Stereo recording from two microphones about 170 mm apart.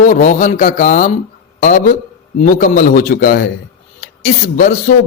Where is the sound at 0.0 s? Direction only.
50° left (ahead or behind); by 3.5 s 65° left (ahead or behind).